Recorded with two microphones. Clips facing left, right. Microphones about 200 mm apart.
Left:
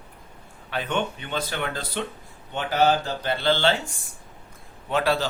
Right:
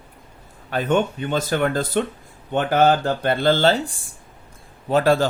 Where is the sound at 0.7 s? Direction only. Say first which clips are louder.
Right 7 dB; 45° right (ahead or behind).